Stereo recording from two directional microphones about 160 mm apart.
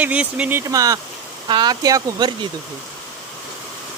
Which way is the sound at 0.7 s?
20° right (ahead or behind).